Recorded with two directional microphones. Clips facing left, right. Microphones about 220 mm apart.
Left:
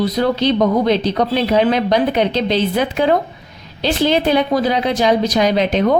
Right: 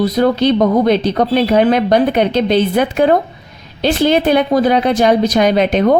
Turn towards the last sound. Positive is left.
turn(degrees=-55)  # may be behind; listen again after turning